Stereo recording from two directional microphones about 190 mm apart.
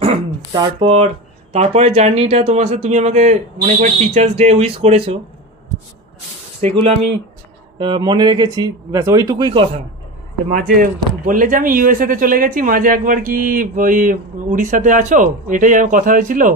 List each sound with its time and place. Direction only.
0.0 s speech: 30° right (ahead or behind)
6.6 s speech: 35° right (ahead or behind)
7.8 s speech: 25° right (ahead or behind)
10.5 s speech: 45° right (ahead or behind)